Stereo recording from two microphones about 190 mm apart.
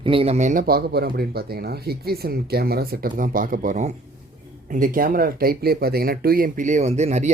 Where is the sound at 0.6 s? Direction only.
55° right (ahead or behind).